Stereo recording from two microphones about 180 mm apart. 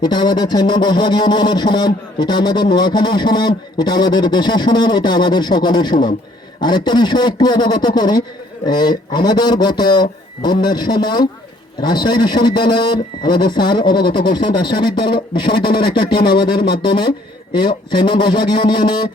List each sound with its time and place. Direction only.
0.0 s a man's voice: 25° left (ahead or behind)